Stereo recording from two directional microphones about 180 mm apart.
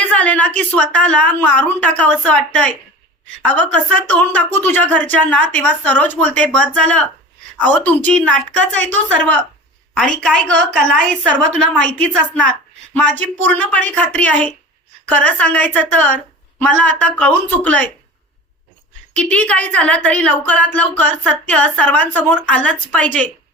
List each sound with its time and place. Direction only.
0.1 s a sound: 10° left (ahead or behind)
0.8 s a woman's voice: 5° left (ahead or behind)
9.9 s a woman's voice: 5° left (ahead or behind)
19.1 s a woman's voice: 5° left (ahead or behind)